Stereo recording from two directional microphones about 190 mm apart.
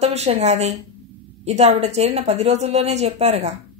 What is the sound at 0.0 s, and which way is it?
A woman's voice, 35° right (ahead or behind).